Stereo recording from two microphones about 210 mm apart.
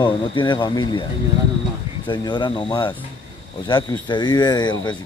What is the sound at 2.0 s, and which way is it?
Speech, 25° left (ahead or behind).